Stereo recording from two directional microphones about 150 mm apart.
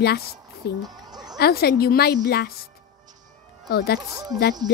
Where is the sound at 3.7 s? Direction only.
90° left.